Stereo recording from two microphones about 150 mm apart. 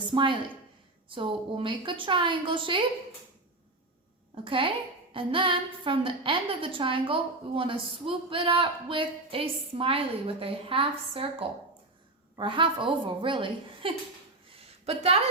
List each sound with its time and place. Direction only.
0.0 s a woman's voice: 35° right (ahead or behind)
4.4 s a woman's voice: 35° right (ahead or behind)